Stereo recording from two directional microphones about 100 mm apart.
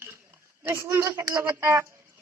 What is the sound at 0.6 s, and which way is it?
Child singing, 25° right (ahead or behind).